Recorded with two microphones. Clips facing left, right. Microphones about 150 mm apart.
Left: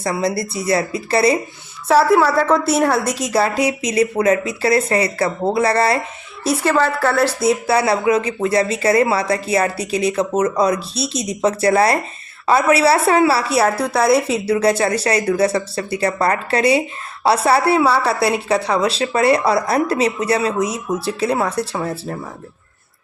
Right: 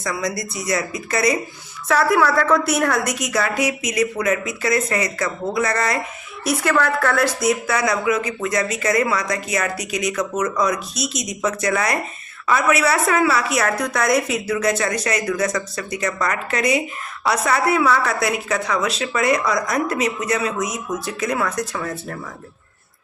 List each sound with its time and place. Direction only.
0.0 s a woman's voice: 30° left (ahead or behind)